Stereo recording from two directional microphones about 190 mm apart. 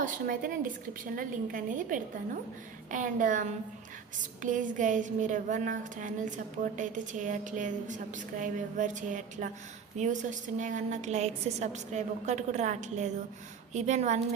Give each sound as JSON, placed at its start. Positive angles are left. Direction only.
{"t": 0.0, "sound": "a woman's voice", "side_deg": -45}